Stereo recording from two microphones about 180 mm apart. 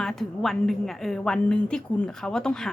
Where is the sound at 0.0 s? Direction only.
Centre (ahead or behind).